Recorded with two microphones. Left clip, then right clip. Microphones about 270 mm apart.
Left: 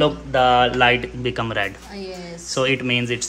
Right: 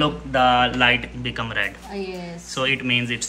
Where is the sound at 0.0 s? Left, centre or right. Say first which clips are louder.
Left 2 dB; centre.